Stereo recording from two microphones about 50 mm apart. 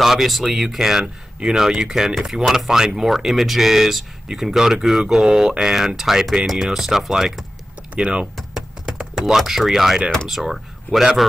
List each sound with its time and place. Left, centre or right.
0.0 s speech: centre
9.2 s speech: centre